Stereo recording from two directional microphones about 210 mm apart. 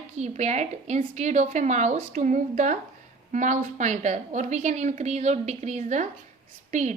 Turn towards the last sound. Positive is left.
turn(degrees=-35)  # may be behind; listen again after turning